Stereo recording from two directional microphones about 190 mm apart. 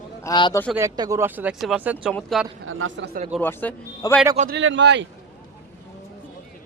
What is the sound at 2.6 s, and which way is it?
Speech, 90° right.